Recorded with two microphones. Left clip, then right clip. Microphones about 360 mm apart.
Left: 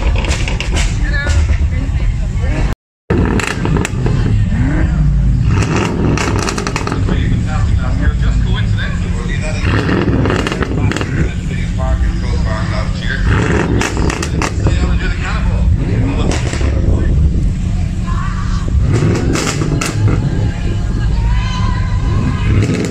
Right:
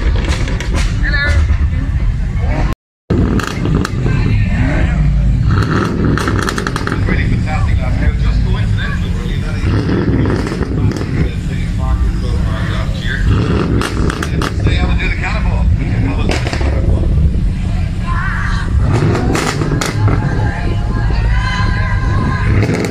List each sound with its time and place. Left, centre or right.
5.7 s vehicle: centre
9.7 s a sound: left
13.3 s roaring cats: left